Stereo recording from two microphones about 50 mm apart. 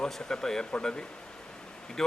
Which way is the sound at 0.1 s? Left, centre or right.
Centre.